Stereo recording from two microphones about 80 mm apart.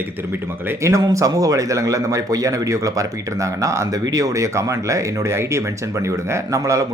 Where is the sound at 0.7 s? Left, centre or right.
Right.